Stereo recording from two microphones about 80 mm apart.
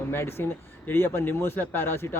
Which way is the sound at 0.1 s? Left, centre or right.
Left.